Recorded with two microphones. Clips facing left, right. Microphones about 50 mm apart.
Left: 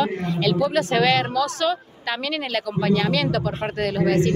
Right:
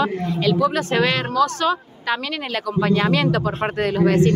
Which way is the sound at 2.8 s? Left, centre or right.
Right.